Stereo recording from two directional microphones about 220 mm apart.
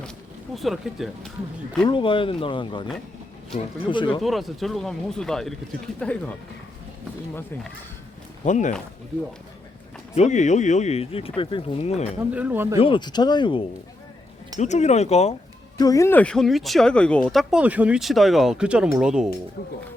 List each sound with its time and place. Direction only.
0.5 s speech: centre (ahead or behind)
1.9 s speech: 20° left (ahead or behind)
4.2 s speech: centre (ahead or behind)
8.4 s speech: 35° left (ahead or behind)
10.2 s speech: 30° left (ahead or behind)
12.3 s speech: 5° right (ahead or behind)
12.8 s speech: 20° left (ahead or behind)
15.8 s speech: 15° left (ahead or behind); by 19.3 s 5° right (ahead or behind)